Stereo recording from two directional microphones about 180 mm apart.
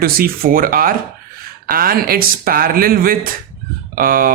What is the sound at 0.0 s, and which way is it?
Speech, 55° right (ahead or behind).